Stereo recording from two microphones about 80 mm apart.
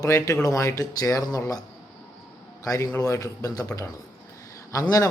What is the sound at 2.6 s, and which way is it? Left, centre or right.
A man's voice, left.